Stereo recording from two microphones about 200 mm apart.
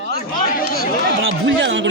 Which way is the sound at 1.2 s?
70° right (ahead or behind).